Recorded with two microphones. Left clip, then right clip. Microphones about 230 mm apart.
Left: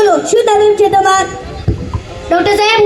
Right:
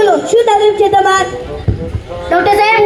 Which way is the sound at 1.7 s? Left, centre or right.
Left.